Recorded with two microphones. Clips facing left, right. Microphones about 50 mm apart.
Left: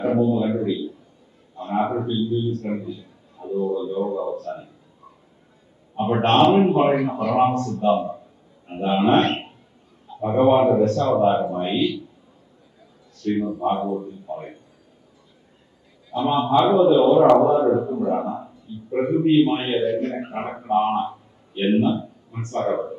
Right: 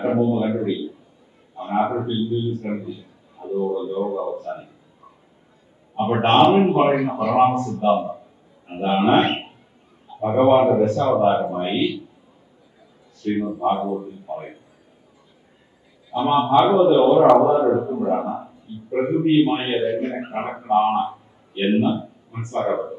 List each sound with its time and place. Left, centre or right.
0.0 s a man's voice: right
6.0 s a man's voice: right
13.2 s a man's voice: right
16.1 s a man's voice: right